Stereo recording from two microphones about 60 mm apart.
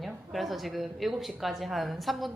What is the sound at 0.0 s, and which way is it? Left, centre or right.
Speech, centre.